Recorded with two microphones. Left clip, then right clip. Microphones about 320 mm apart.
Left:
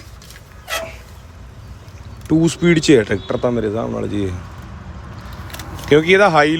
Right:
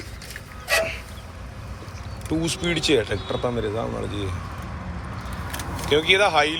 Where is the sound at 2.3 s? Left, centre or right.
Left.